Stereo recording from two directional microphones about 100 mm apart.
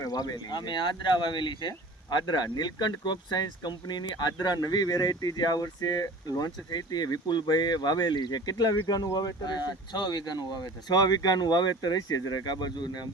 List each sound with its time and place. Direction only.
0.0 s speech: 40° left (ahead or behind)